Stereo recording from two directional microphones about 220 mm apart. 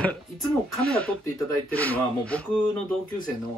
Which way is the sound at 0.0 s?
5° left (ahead or behind).